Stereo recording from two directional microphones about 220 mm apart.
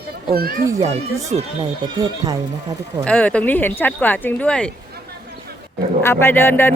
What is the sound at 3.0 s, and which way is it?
Speech, 5° left (ahead or behind).